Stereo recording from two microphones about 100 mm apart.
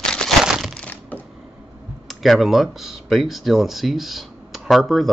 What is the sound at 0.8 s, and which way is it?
Typing, 15° left (ahead or behind).